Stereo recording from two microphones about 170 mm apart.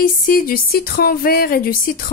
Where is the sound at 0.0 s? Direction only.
55° left (ahead or behind).